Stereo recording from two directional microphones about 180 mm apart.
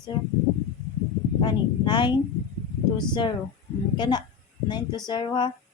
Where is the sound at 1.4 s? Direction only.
25° left (ahead or behind).